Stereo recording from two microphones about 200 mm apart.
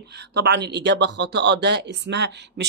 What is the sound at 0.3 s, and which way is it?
Speech, 55° right (ahead or behind).